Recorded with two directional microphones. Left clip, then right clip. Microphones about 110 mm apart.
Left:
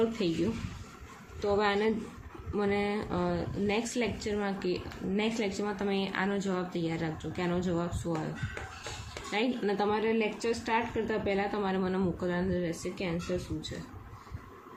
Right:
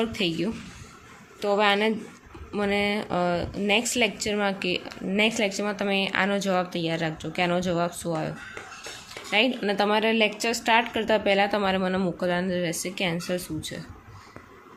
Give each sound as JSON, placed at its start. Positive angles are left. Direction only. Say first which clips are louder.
{"t": 1.4, "sound": "speech", "louder": "right 6 dB", "side_deg": -25}
{"t": 9.3, "sound": "speech", "louder": "right 8 dB", "side_deg": -30}
{"t": 9.9, "sound": "a woman's voice", "louder": "right 7 dB", "side_deg": -50}